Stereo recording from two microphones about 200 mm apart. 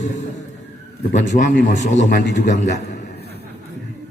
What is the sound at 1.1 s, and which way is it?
A man's voice, 40° left (ahead or behind).